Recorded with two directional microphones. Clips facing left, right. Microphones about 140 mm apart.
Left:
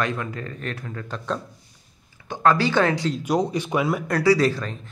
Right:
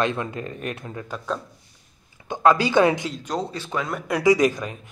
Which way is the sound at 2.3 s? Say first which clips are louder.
Right 1 dB; 15° right (ahead or behind).